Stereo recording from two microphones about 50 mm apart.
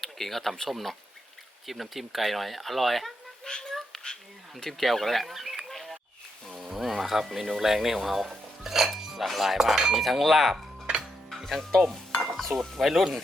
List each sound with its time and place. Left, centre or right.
0.0 s speech: centre
3.4 s cat: centre
4.6 s speech: centre
11.3 s music: centre
11.8 s stir: centre
12.5 s speech: centre